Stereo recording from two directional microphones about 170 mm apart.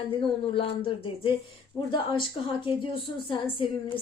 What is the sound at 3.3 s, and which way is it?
Speech, 30° left (ahead or behind).